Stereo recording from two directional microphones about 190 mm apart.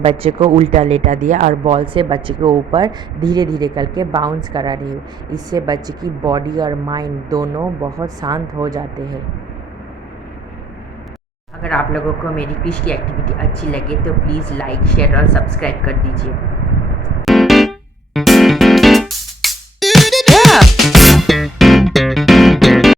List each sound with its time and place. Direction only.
0.0 s speech: 30° right (ahead or behind)
11.6 s speech: 5° left (ahead or behind)
14.3 s speech: 5° left (ahead or behind)
17.2 s music: centre (ahead or behind)